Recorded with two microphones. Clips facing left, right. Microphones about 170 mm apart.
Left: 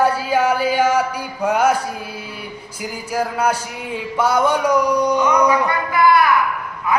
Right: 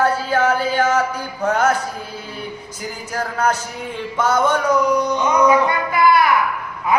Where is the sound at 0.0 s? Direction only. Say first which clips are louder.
Left 1 dB; 10° left (ahead or behind).